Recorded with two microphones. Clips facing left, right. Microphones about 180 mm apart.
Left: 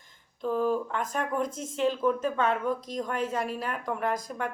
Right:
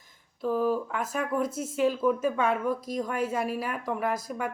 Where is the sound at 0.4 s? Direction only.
5° right (ahead or behind).